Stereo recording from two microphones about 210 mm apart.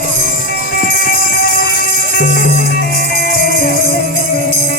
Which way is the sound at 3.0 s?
45° left (ahead or behind).